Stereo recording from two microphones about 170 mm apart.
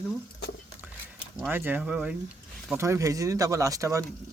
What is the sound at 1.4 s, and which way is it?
Speech, 10° right (ahead or behind).